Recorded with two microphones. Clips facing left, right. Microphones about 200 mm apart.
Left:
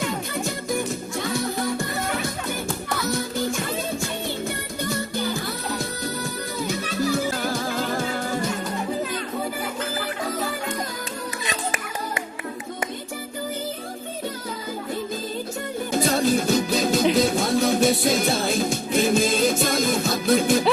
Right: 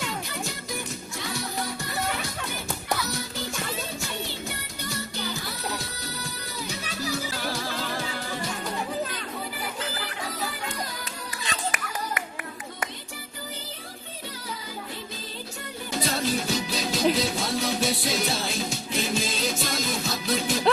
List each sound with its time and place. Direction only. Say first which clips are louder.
0.0 s music: left 6 dB; 50° left (ahead or behind)
6.6 s music: left 8 dB; 50° left (ahead or behind)
11.4 s music: even; 25° left (ahead or behind)
15.9 s music: left 6 dB; 50° left (ahead or behind)